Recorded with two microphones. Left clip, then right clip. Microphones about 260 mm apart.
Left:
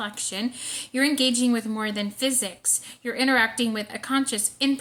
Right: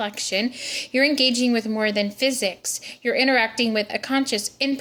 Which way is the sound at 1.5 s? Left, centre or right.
Left.